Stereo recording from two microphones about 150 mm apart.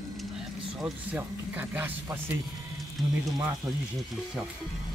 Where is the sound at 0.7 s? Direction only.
10° right (ahead or behind).